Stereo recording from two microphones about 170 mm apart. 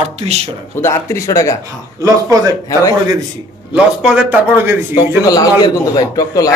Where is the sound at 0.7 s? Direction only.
15° left (ahead or behind).